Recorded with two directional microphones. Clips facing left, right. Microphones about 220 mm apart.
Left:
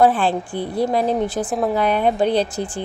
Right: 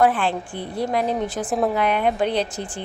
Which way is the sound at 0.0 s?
35° left (ahead or behind).